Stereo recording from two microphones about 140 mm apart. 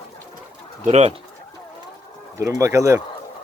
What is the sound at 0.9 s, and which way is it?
Speech, 55° right (ahead or behind).